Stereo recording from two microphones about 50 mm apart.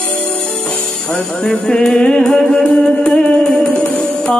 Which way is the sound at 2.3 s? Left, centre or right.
Centre.